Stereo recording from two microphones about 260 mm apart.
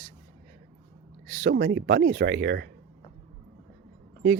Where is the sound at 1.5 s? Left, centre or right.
Right.